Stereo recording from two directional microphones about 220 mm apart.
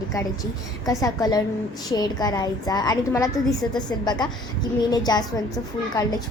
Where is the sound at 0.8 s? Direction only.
15° left (ahead or behind).